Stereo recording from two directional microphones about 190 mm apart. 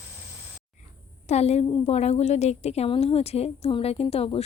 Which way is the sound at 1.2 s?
35° left (ahead or behind).